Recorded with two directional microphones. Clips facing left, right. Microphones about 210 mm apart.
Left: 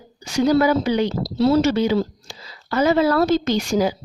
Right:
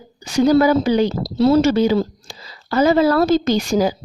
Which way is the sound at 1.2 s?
50° right (ahead or behind).